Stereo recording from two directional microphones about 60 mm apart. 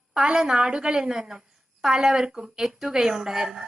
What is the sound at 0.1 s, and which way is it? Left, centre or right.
A woman's voice, centre.